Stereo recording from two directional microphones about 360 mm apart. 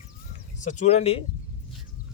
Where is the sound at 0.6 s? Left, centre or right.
Left.